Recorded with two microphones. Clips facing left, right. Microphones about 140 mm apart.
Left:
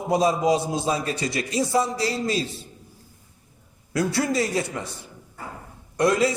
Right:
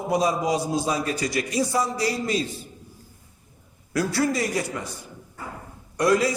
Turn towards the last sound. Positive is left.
turn(degrees=25)  # may be behind; listen again after turning